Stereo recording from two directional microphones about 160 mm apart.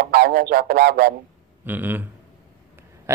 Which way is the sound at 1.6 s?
10° right (ahead or behind).